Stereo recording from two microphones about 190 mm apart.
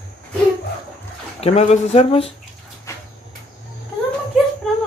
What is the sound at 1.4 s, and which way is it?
Speech, 35° left (ahead or behind).